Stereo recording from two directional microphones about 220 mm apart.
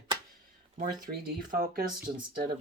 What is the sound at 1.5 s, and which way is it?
Speech, 40° right (ahead or behind).